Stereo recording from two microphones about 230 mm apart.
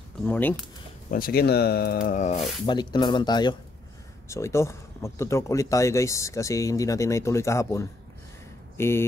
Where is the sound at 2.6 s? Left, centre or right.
Centre.